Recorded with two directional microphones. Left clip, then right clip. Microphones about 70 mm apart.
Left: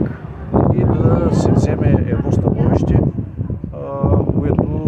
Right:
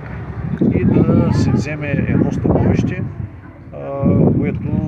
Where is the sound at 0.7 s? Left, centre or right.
Left.